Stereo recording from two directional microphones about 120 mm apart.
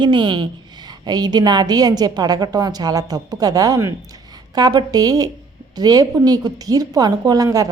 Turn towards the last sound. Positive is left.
turn(degrees=-30)  # may be behind; listen again after turning